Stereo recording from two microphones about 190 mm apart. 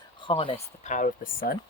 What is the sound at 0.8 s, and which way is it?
Speech, 45° left (ahead or behind).